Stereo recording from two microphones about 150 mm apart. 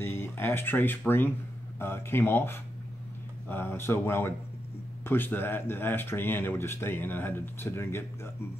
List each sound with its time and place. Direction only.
0.0 s speech: 15° left (ahead or behind)